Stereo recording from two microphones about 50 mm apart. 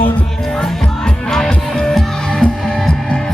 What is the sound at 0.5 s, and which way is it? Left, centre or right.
Music, centre.